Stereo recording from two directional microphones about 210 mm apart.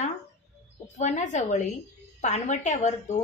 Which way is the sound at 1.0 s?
35° left (ahead or behind).